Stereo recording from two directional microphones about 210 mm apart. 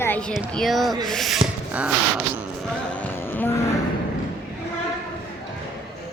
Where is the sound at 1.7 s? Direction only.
5° right (ahead or behind).